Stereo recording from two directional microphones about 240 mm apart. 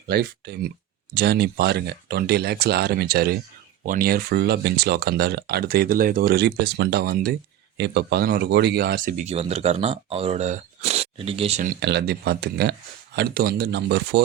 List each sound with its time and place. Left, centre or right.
0.1 s speech: right